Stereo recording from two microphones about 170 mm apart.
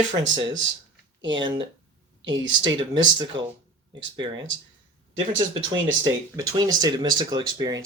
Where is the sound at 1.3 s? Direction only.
25° right (ahead or behind).